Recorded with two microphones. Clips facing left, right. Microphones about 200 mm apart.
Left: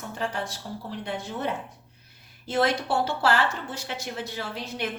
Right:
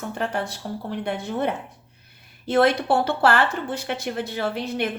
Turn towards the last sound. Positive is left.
turn(degrees=-60)  # may be behind; listen again after turning